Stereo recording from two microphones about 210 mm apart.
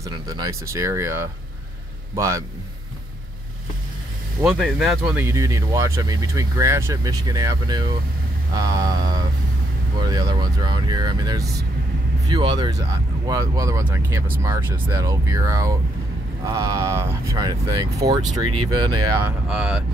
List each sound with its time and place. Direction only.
0.0 s speech: 15° right (ahead or behind)
4.4 s speech: 5° right (ahead or behind)
5.2 s speech: 15° right (ahead or behind)
19.2 s speech: 5° right (ahead or behind)